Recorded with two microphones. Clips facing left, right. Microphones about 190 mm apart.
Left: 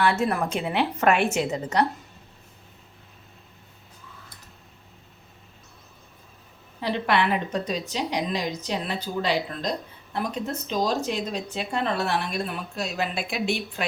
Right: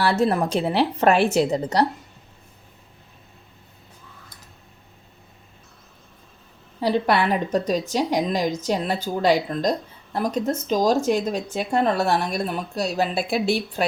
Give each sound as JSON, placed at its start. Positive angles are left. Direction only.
{"t": 0.0, "sound": "speech", "side_deg": -35}
{"t": 6.7, "sound": "speech", "side_deg": -40}